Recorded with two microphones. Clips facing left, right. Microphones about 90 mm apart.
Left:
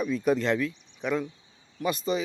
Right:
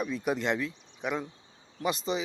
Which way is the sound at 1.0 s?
15° right (ahead or behind).